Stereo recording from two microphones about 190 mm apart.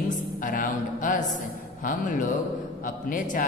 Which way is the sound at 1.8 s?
45° left (ahead or behind).